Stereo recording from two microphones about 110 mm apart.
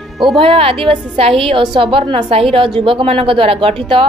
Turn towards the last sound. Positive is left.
turn(degrees=-55)  # may be behind; listen again after turning